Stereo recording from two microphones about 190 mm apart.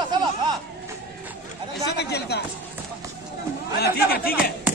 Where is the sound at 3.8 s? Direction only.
55° left (ahead or behind).